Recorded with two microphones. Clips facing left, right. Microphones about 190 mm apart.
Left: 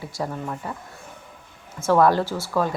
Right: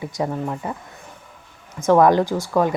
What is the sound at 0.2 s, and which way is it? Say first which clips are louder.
Speech: right 4 dB; 20° right (ahead or behind).